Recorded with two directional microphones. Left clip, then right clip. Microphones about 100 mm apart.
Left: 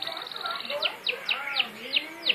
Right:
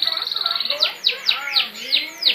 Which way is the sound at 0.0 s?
25° right (ahead or behind).